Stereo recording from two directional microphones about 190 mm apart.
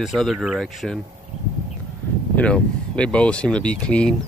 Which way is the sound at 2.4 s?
5° left (ahead or behind).